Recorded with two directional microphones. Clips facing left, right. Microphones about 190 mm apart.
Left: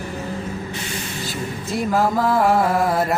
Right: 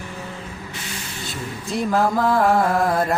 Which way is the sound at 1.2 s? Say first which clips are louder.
Left 1 dB; centre (ahead or behind).